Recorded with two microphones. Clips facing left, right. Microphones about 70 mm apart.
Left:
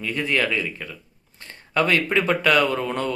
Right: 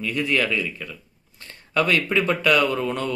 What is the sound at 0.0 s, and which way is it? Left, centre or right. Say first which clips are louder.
Speech: even; left.